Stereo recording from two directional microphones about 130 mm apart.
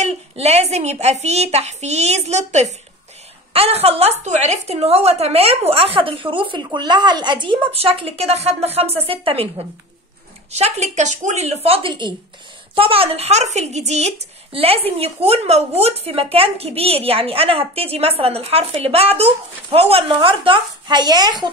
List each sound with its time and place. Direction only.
0.0 s a woman's voice: 55° right (ahead or behind)
10.5 s a woman's voice: 60° right (ahead or behind); by 21.5 s 35° right (ahead or behind)